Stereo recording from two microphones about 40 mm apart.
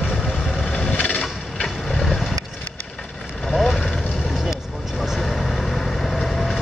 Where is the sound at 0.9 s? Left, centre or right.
Left.